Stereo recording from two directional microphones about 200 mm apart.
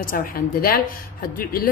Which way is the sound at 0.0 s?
45° left (ahead or behind).